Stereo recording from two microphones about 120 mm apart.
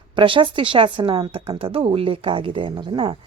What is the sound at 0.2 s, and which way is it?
Speech, 45° right (ahead or behind).